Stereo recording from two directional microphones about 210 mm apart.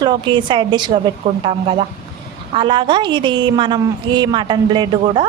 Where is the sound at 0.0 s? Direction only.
20° right (ahead or behind).